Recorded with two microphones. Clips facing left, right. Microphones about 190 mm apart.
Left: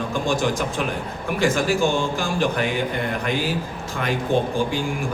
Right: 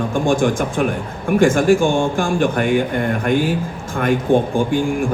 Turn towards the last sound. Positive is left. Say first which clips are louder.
# right 6 dB
turn(degrees=-50)  # may be behind; listen again after turning